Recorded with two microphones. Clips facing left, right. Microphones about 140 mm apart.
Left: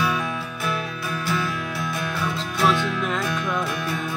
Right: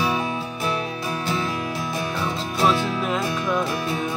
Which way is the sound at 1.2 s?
25° right (ahead or behind).